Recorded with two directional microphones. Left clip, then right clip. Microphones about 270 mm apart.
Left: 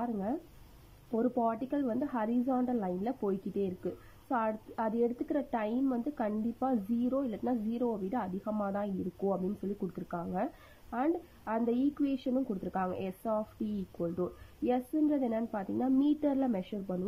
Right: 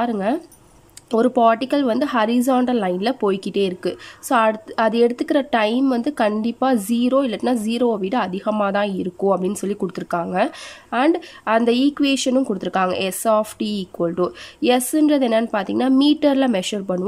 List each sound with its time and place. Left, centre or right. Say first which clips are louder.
0.0 s a woman's voice: right 15 dB; right
9.9 s speech: right 18 dB; centre